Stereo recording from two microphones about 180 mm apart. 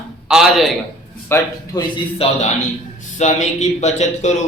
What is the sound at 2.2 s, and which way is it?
A man's voice, 35° left (ahead or behind).